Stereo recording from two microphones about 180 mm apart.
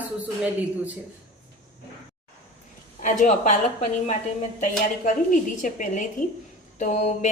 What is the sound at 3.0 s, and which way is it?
Speech, 45° left (ahead or behind).